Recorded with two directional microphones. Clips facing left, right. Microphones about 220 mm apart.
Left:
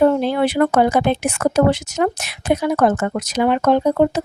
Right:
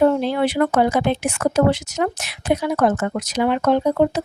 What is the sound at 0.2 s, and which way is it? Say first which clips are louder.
Speech: left 2 dB; 50° left (ahead or behind).